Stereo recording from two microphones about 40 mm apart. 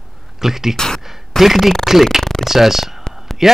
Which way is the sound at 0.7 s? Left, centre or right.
Centre.